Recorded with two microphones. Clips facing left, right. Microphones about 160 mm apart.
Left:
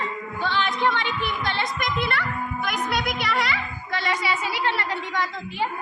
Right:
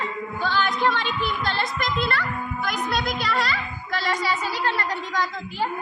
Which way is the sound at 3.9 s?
20° left (ahead or behind).